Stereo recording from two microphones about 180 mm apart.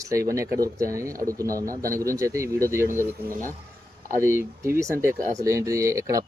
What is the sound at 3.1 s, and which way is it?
Speech, 50° right (ahead or behind).